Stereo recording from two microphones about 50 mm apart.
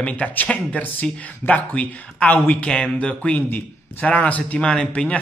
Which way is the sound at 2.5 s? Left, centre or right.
Centre.